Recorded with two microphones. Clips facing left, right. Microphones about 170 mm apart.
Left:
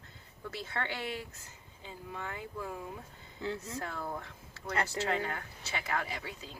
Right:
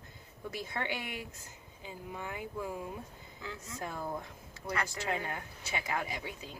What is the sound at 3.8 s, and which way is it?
A woman's voice, 15° right (ahead or behind).